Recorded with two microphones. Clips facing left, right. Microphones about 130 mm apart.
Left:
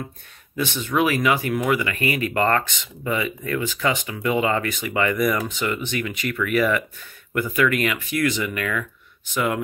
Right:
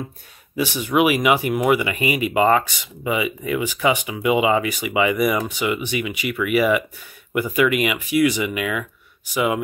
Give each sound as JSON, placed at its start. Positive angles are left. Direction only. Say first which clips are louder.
{"t": 0.6, "sound": "speech", "louder": "right 3 dB", "side_deg": -10}